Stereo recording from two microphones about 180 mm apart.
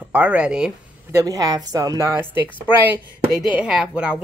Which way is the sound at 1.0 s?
15° right (ahead or behind).